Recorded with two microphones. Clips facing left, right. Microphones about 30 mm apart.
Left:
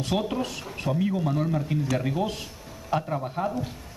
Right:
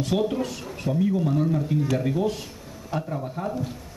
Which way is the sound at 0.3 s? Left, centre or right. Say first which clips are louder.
Right 2 dB; centre.